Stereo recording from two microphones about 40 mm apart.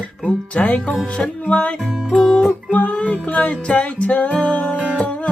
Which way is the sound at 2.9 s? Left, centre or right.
Left.